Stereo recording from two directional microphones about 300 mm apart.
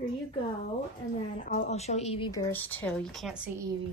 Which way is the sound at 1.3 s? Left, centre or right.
Left.